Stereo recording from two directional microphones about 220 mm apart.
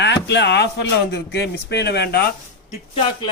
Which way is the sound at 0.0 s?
55° left (ahead or behind).